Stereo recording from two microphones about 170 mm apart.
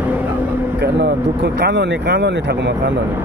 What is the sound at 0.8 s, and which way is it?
Speech, 80° right.